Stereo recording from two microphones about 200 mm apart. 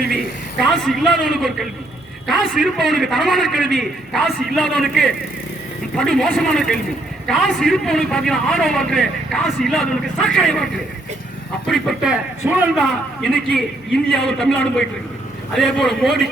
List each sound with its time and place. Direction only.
0.6 s a man's voice: centre (ahead or behind)